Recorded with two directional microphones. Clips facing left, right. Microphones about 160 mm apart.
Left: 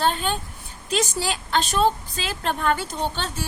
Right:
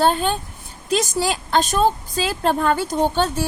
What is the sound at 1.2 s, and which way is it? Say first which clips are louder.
A woman's voice: right 5 dB; 45° right (ahead or behind).